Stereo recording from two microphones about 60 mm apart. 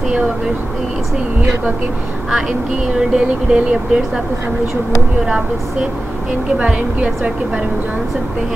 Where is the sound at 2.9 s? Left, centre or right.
Centre.